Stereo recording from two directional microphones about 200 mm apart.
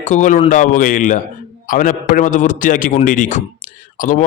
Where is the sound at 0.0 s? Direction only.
35° left (ahead or behind).